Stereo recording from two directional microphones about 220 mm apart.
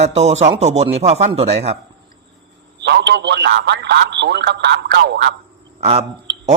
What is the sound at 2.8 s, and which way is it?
A man's voice, 50° right (ahead or behind).